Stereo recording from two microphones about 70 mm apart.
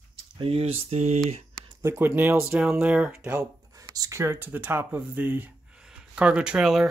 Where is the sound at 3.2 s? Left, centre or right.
Right.